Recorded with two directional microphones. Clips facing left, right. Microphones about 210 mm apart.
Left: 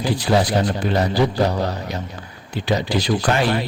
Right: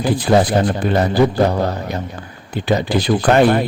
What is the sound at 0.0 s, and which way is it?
A man's voice, 50° right (ahead or behind).